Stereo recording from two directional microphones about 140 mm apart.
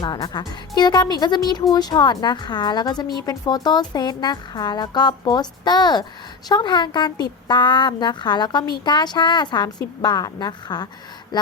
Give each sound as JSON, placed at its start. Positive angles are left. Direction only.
{"t": 0.0, "sound": "a woman's voice", "side_deg": 30}